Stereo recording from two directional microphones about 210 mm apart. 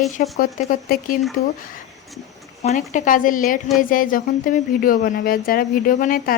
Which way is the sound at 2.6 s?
35° left (ahead or behind).